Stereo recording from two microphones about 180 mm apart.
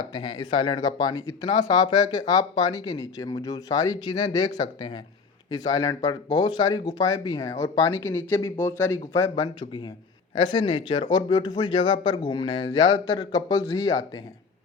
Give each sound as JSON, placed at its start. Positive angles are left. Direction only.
{"t": 0.0, "sound": "speech", "side_deg": 25}